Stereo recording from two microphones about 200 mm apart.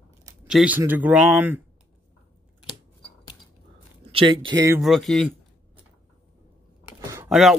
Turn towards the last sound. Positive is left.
turn(degrees=-15)  # may be behind; listen again after turning